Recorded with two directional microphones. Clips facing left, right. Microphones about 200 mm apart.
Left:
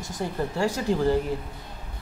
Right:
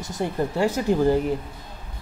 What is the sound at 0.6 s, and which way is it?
Speech, 20° right (ahead or behind).